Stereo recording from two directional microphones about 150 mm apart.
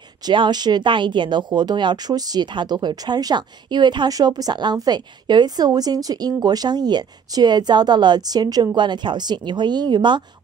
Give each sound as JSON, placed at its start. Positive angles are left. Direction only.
{"t": 0.3, "sound": "speech", "side_deg": -30}